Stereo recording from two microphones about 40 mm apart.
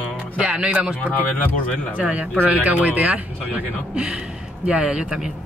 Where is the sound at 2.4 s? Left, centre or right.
Right.